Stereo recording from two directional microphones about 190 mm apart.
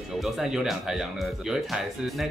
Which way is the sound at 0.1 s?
Centre (ahead or behind).